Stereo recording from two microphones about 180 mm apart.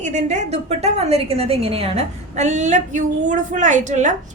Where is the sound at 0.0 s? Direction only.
40° right (ahead or behind).